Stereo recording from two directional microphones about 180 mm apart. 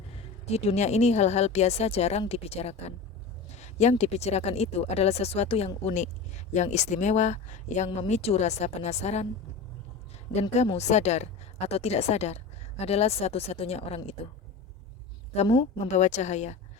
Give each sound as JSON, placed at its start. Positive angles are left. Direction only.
{"t": 0.4, "sound": "speech", "side_deg": 35}
{"t": 10.5, "sound": "speech", "side_deg": 40}
{"t": 15.9, "sound": "speech", "side_deg": 40}